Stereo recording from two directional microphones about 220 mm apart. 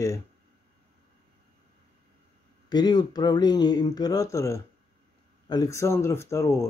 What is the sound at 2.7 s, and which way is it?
Speech, 20° left (ahead or behind).